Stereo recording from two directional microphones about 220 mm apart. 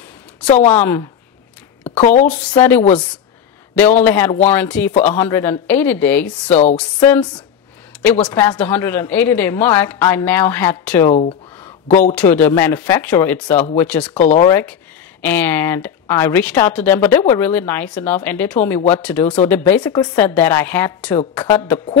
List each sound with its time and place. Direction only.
0.7 s a woman's voice: 10° left (ahead or behind)
1.9 s speech: 30° left (ahead or behind)
2.2 s speech: 5° left (ahead or behind)
3.7 s a woman's voice: 10° left (ahead or behind)
6.5 s speech: 30° left (ahead or behind)
6.8 s speech: 5° left (ahead or behind)
8.3 s speech: 20° left (ahead or behind)
8.5 s a woman's voice: 10° left (ahead or behind)
12.2 s a woman's voice: 10° left (ahead or behind)
14.1 s speech: 30° left (ahead or behind)
14.5 s a woman's voice: 10° left (ahead or behind)